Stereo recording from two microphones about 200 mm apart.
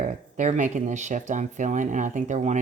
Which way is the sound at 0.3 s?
35° right (ahead or behind).